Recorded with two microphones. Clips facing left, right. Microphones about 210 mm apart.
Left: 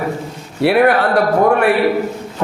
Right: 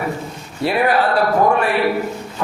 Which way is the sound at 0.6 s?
65° left (ahead or behind).